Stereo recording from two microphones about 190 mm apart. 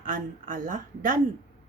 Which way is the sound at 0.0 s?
45° right (ahead or behind).